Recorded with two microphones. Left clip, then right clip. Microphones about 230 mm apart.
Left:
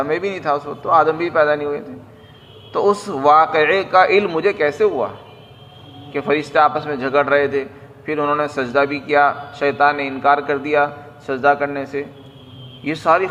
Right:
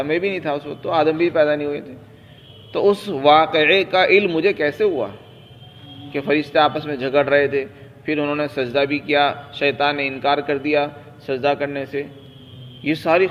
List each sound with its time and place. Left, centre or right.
0.0 s a man's voice: right
2.8 s a man's voice: right
6.1 s a man's voice: right